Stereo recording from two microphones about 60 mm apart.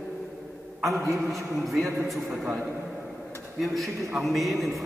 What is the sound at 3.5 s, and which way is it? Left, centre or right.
A man's voice, centre.